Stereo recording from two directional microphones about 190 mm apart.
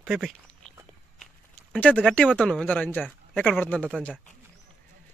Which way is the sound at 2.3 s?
5° left (ahead or behind).